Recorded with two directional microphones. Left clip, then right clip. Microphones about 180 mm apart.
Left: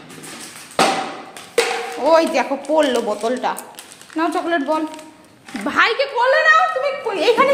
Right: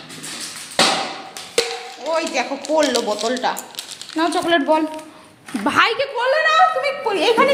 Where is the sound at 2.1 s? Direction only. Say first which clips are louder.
Left 4 dB; 20° left (ahead or behind).